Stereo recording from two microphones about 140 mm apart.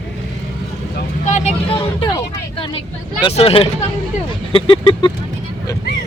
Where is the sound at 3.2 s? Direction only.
40° left (ahead or behind).